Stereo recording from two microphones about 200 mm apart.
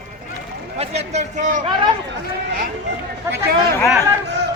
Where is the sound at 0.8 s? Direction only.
35° right (ahead or behind).